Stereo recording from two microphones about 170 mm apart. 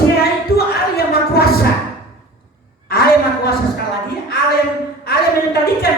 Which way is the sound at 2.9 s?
65° left (ahead or behind).